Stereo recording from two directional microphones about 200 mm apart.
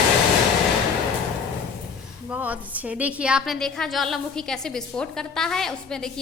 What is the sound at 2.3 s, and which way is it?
A woman's voice, 5° right (ahead or behind).